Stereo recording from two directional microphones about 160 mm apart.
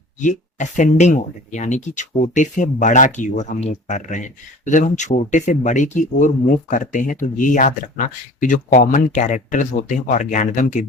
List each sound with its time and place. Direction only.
0.2 s speech: 50° left (ahead or behind)